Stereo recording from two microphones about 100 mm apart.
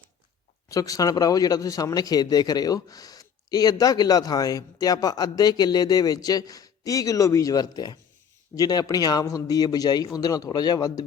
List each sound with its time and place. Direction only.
0.7 s a man's voice: 35° left (ahead or behind)